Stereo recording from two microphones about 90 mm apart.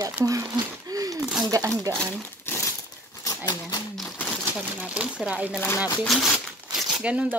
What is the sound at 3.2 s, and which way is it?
Speech, 45° left (ahead or behind).